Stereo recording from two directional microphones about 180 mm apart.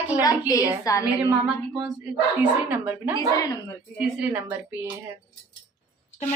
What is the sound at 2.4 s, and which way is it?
A woman's voice, 10° right (ahead or behind).